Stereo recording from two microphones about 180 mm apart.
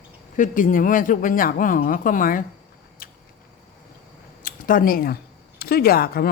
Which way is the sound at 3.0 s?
55° left (ahead or behind).